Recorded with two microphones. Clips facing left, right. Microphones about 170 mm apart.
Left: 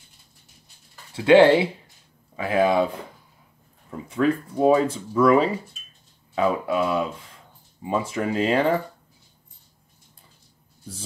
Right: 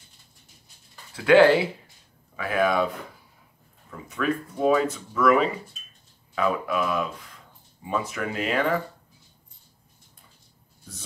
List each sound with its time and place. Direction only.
1.1 s speech: 25° left (ahead or behind)